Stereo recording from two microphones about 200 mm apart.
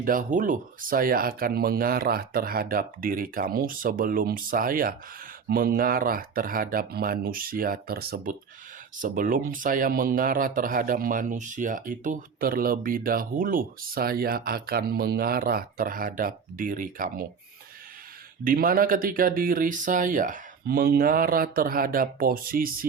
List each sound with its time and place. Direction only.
0.0 s speech: 45° right (ahead or behind)
18.4 s speech: 45° right (ahead or behind)